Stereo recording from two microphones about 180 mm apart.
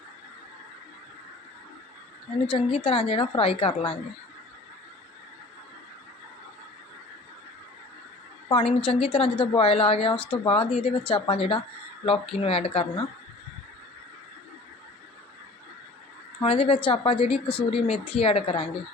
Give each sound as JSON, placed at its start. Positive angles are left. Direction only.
{"t": 2.5, "sound": "a woman's voice", "side_deg": 30}
{"t": 8.4, "sound": "a woman's voice", "side_deg": 30}
{"t": 16.4, "sound": "a woman's voice", "side_deg": 30}